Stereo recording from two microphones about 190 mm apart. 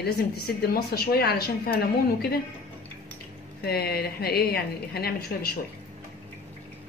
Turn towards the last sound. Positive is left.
turn(degrees=55)  # may be behind; listen again after turning